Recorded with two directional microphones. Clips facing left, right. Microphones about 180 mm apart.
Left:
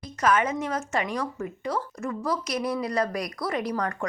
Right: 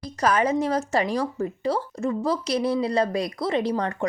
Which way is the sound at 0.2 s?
35° right (ahead or behind).